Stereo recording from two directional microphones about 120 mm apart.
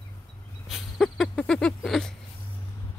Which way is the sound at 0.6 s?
Centre (ahead or behind).